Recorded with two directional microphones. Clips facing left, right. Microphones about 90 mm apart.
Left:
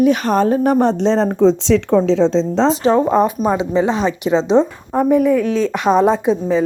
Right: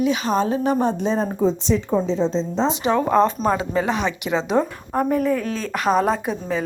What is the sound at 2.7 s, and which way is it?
Speech, 35° left (ahead or behind).